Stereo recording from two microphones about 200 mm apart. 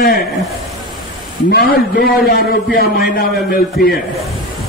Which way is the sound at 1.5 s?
50° left (ahead or behind).